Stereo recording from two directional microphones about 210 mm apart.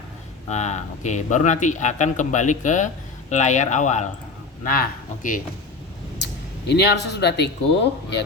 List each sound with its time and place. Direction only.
0.4 s a man's voice: 35° left (ahead or behind)
6.7 s speech: 55° left (ahead or behind)